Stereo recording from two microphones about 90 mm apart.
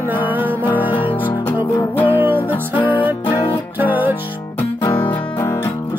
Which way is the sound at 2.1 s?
20° right (ahead or behind).